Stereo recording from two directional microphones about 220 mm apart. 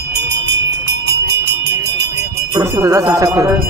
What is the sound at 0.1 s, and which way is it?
Horse, 50° right (ahead or behind).